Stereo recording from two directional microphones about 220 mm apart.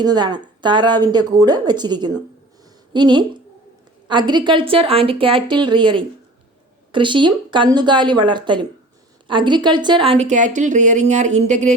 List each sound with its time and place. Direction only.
0.0 s speech: 20° right (ahead or behind)